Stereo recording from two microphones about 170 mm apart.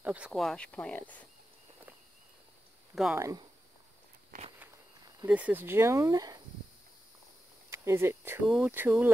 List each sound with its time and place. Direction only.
0.0 s speech: 5° right (ahead or behind); by 1.2 s 10° left (ahead or behind)
2.9 s a sound: 5° right (ahead or behind)
3.2 s speech: 20° right (ahead or behind)
4.3 s walk: 55° right (ahead or behind)
5.2 s speech: 10° right (ahead or behind)
7.7 s speech: 15° right (ahead or behind)